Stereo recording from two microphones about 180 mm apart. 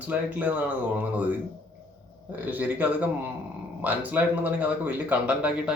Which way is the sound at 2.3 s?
10° right (ahead or behind).